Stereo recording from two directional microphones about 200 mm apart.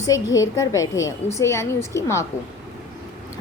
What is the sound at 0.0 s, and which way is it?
A woman's voice, 15° left (ahead or behind).